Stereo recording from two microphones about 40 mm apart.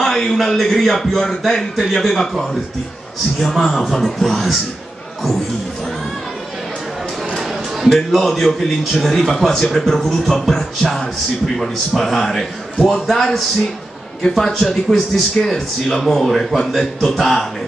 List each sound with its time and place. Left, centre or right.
0.0 s a man's voice: centre
8.1 s a man's voice: centre